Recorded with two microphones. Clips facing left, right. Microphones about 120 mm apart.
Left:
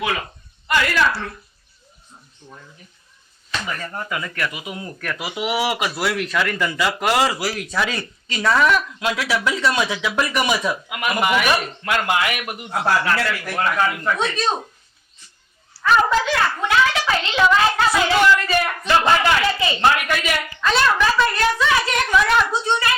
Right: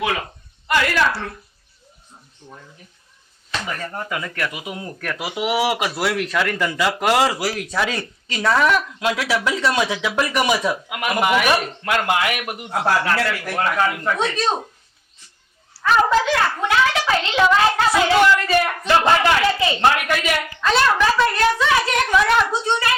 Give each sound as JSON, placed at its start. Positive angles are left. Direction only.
{"t": 0.0, "sound": "a child's voice", "side_deg": -45}
{"t": 2.4, "sound": "a child's voice", "side_deg": -35}
{"t": 15.8, "sound": "a child's voice", "side_deg": -40}